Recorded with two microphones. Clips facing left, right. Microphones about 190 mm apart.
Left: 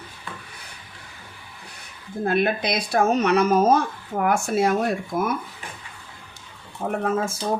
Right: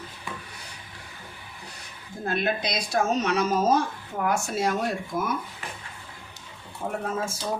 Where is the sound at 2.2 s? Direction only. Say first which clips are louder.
Left 5 dB; 60° left (ahead or behind).